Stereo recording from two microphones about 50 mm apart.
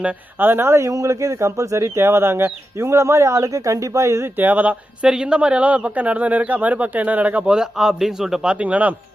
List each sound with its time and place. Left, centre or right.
0.3 s speech: right
0.8 s speech: right
2.0 s speech: right
4.4 s speech: right
5.0 s a man's voice: centre
7.5 s a man's voice: centre
8.4 s a man's voice: right